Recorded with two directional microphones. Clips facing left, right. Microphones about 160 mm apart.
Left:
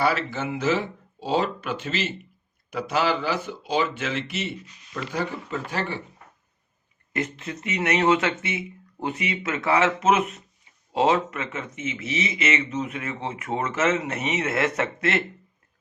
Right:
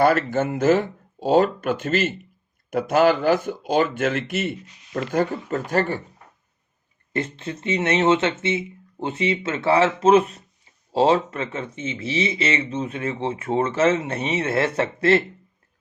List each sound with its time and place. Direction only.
0.0 s speech: 50° right (ahead or behind)
7.1 s speech: 30° right (ahead or behind)